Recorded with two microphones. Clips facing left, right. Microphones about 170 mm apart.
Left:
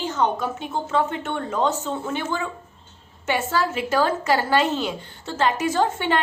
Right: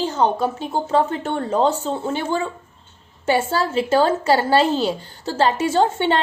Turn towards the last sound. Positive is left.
turn(degrees=-30)  # may be behind; listen again after turning